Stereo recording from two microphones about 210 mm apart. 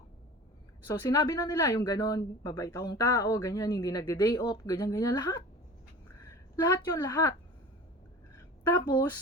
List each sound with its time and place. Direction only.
0.9 s a woman's voice: 15° left (ahead or behind)
8.7 s speech: 20° left (ahead or behind)